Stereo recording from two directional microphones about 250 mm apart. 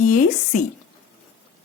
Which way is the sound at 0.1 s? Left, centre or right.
Left.